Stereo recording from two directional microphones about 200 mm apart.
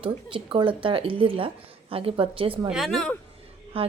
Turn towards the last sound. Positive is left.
turn(degrees=-30)  # may be behind; listen again after turning